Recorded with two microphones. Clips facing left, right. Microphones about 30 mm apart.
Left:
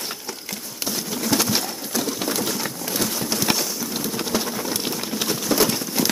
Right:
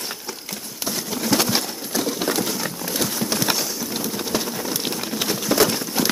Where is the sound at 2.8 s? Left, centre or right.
Centre.